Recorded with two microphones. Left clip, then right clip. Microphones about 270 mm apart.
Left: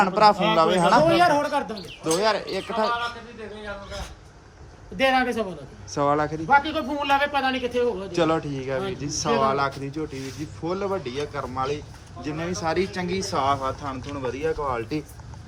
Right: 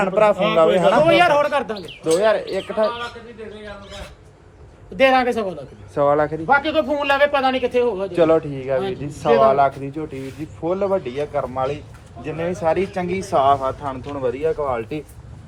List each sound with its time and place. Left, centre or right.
0.0 s speech: centre
1.1 s a man's voice: centre
2.1 s speech: centre
4.9 s a man's voice: centre
13.1 s a man's voice: left
13.3 s a man's voice: centre